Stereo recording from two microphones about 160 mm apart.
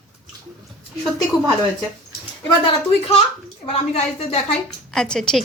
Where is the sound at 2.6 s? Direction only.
35° left (ahead or behind).